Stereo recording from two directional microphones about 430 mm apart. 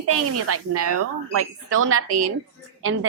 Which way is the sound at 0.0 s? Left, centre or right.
Right.